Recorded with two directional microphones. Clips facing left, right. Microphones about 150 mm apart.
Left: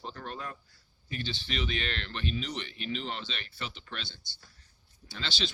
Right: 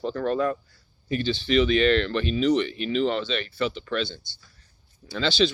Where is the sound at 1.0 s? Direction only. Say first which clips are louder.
Right 12 dB; 75° right (ahead or behind).